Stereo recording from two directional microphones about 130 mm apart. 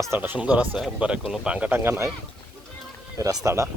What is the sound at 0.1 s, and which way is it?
Speech, 15° right (ahead or behind).